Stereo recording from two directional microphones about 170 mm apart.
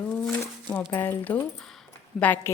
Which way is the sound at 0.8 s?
15° left (ahead or behind).